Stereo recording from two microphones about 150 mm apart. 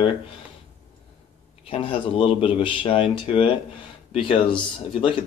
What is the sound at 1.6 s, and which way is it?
Speech, 40° left (ahead or behind).